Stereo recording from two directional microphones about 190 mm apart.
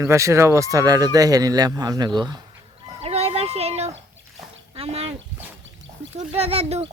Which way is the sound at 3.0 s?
30° right (ahead or behind).